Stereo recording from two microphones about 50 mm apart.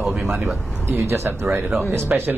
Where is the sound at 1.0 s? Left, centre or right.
Right.